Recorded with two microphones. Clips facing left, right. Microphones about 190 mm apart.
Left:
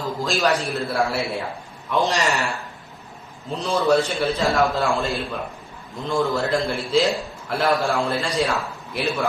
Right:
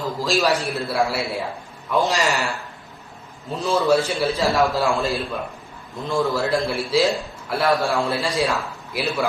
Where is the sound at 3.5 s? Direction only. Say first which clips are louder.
Right 1 dB; 5° right (ahead or behind).